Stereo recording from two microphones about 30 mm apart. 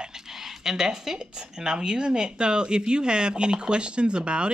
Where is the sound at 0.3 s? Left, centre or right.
Centre.